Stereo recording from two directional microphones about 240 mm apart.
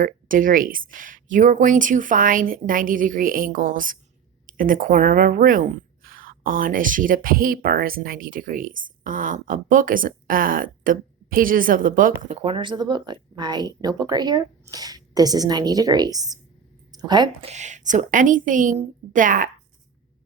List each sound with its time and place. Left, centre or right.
0.0 s a woman's voice: right; by 17.5 s centre
17.5 s a woman's voice: right